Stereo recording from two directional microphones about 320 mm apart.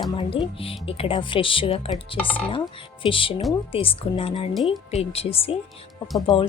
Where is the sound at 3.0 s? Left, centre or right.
Centre.